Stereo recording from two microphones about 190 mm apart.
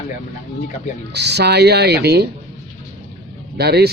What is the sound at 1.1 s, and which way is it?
Speech, 60° right (ahead or behind).